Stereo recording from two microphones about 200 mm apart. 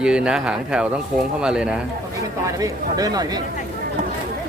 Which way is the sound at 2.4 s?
15° right (ahead or behind).